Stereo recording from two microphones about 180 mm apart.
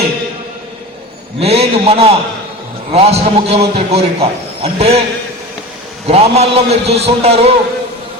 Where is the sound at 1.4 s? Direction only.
35° right (ahead or behind).